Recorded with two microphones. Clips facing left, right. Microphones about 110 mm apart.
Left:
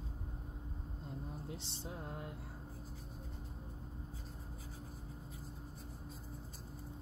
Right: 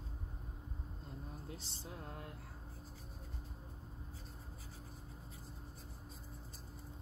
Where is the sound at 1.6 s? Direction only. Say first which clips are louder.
Left 3 dB; 20° left (ahead or behind).